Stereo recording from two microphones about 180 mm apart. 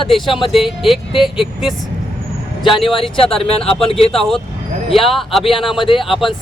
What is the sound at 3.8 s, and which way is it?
Speech, 35° left (ahead or behind).